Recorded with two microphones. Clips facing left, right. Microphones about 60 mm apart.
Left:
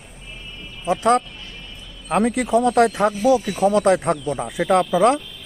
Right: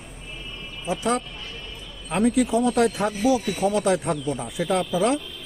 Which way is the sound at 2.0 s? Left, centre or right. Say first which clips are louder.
Left 1 dB; left.